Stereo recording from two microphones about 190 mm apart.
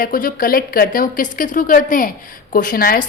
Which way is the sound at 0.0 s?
50° left (ahead or behind).